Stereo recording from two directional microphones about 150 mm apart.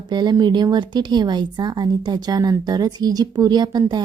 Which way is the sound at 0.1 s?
30° right (ahead or behind).